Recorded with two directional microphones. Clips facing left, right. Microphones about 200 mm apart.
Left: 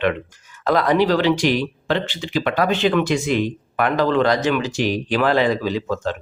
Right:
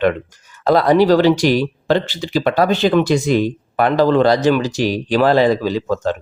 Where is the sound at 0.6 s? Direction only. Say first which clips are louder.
Right 5 dB; 35° right (ahead or behind).